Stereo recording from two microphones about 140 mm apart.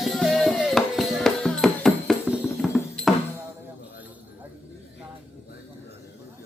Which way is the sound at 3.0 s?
5° left (ahead or behind).